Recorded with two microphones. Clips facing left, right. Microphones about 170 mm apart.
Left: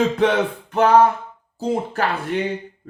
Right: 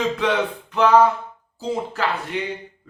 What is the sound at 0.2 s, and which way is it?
Speech, 50° left (ahead or behind).